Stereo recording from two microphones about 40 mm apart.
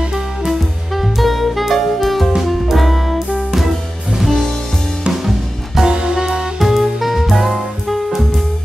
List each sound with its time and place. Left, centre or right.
0.5 s music: centre
4.2 s music: centre
5.9 s music: centre
6.6 s music: centre